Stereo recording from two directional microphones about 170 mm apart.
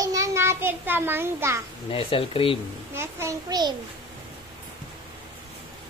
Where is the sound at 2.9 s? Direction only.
15° right (ahead or behind).